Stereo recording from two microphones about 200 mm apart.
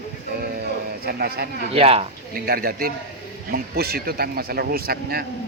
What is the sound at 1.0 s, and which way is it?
Speech, 50° right (ahead or behind).